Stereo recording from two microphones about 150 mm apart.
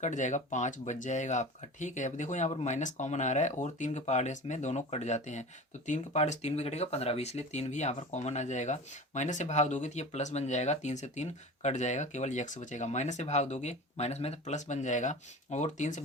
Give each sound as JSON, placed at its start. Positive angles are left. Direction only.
{"t": 0.0, "sound": "speech", "side_deg": 55}